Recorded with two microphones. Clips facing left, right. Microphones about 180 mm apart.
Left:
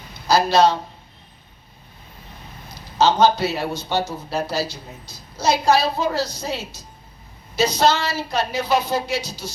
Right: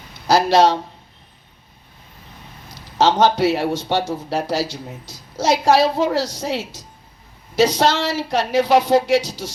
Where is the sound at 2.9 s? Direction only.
90° right.